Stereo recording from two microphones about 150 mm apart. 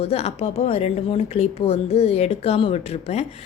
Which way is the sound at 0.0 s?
45° left (ahead or behind).